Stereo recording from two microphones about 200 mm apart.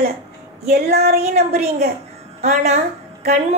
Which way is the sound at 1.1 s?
35° right (ahead or behind).